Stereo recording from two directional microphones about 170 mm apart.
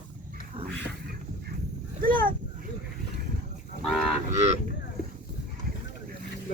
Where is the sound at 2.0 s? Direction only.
55° right (ahead or behind).